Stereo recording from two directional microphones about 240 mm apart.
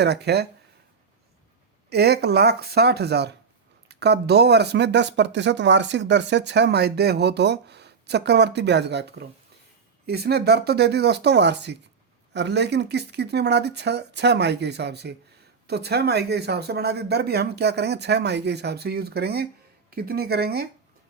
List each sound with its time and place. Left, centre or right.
0.0 s speech: right
1.9 s speech: right